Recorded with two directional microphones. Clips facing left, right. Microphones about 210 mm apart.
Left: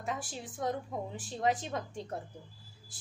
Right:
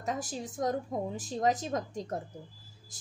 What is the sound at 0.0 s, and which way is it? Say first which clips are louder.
A woman's voice: right 4 dB; 40° right (ahead or behind).